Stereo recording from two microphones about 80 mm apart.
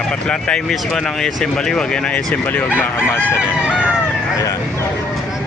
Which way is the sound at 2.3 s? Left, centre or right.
Left.